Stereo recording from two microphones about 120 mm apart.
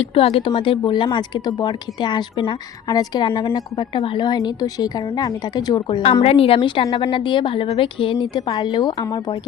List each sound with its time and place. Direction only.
0.0 s a woman's voice: 55° left (ahead or behind)
2.9 s a woman's voice: 35° left (ahead or behind)
3.2 s a woman's voice: 45° left (ahead or behind)
6.2 s a woman's voice: 55° left (ahead or behind); by 9.4 s 35° left (ahead or behind)